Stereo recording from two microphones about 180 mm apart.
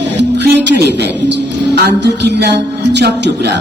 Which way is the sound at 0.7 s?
65° right (ahead or behind).